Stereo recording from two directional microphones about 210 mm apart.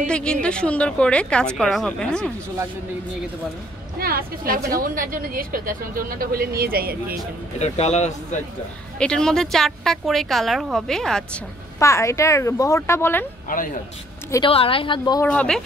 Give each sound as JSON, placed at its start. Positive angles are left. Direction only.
{"t": 0.0, "sound": "a woman's voice", "side_deg": 5}
{"t": 4.0, "sound": "speech", "side_deg": -45}
{"t": 7.5, "sound": "speech", "side_deg": 30}
{"t": 9.0, "sound": "a woman's voice", "side_deg": 5}
{"t": 11.8, "sound": "speech", "side_deg": 15}
{"t": 13.5, "sound": "speech", "side_deg": 40}
{"t": 14.3, "sound": "a woman's voice", "side_deg": 25}
{"t": 15.2, "sound": "a woman's voice", "side_deg": 5}